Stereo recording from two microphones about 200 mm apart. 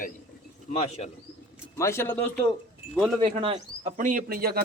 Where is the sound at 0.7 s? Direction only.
30° left (ahead or behind).